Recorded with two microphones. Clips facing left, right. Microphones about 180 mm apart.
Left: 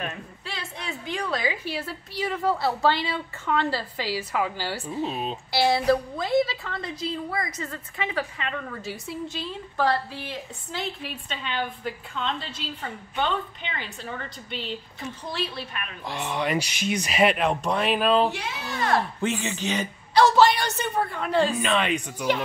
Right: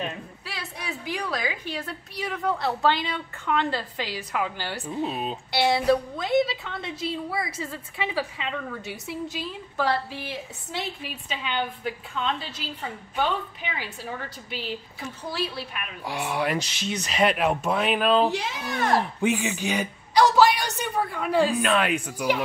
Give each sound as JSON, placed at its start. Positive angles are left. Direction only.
{"t": 0.5, "sound": "a woman's voice", "side_deg": 0}
{"t": 16.5, "sound": "a woman's voice", "side_deg": 10}
{"t": 18.9, "sound": "a woman's voice", "side_deg": -15}